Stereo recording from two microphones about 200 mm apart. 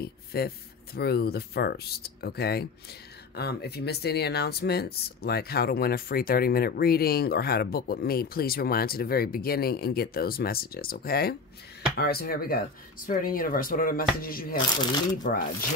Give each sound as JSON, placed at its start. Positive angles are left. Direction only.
{"t": 0.0, "sound": "speech", "side_deg": 50}